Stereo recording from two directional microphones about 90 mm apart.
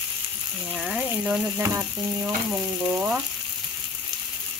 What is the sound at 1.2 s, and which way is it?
Frying, 20° right (ahead or behind).